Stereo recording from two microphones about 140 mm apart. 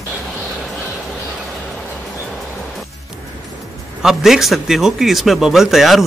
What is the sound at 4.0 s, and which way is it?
Speech, 5° right (ahead or behind).